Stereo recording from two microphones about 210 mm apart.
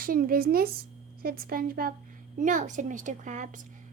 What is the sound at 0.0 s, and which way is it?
A woman's voice, 45° right (ahead or behind).